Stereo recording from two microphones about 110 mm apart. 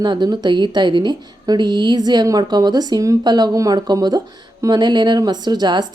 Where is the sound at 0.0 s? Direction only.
40° right (ahead or behind).